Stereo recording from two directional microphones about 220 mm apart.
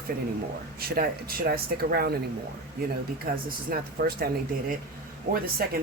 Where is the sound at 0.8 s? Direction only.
45° right (ahead or behind).